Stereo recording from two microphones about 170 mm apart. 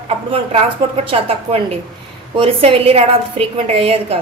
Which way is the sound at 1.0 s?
35° right (ahead or behind).